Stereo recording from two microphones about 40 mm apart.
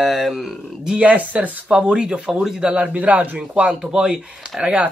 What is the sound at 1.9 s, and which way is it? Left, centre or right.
Speech, right.